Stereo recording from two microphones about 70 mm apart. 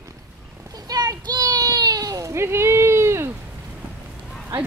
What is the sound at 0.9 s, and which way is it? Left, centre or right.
Children playing, right.